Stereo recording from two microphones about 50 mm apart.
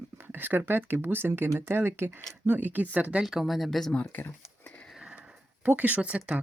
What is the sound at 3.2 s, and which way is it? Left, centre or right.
Speech, centre.